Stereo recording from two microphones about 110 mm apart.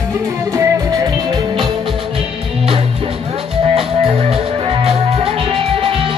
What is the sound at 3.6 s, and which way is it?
Music, 60° right (ahead or behind).